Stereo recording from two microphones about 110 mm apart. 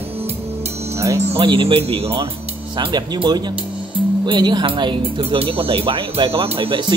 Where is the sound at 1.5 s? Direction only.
55° right (ahead or behind).